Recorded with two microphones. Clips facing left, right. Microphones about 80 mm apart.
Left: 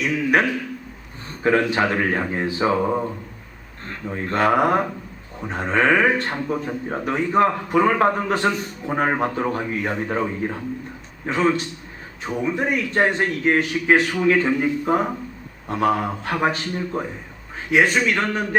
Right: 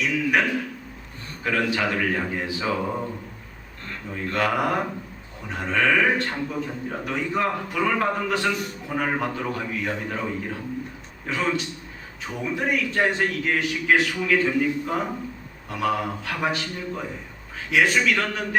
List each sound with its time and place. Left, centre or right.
0.0 s a man's voice: left
1.5 s a man's voice: left
4.1 s a man's voice: left